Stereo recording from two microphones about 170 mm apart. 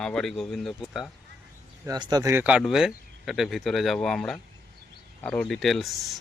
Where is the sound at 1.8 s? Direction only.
25° right (ahead or behind).